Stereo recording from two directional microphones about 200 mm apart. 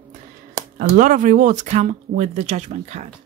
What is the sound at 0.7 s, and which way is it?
Speech, 40° right (ahead or behind).